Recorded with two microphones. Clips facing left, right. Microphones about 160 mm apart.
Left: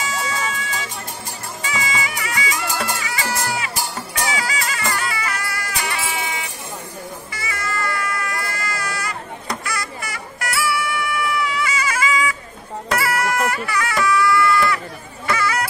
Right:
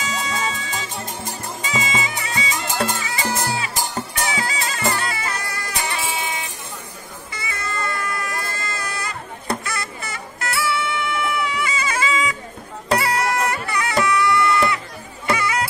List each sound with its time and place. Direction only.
0.1 s music: 20° right (ahead or behind)
4.2 s bagpipes: 25° right (ahead or behind)
7.3 s a sound: 25° right (ahead or behind)
12.9 s music: 20° right (ahead or behind)